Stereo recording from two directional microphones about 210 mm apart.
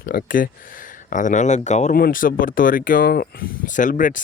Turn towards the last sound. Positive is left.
turn(degrees=40)  # may be behind; listen again after turning